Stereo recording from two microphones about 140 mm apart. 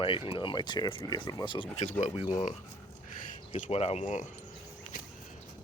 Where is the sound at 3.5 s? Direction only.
50° left (ahead or behind).